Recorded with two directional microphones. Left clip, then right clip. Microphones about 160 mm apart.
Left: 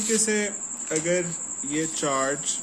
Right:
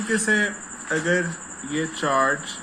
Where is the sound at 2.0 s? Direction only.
50° left (ahead or behind).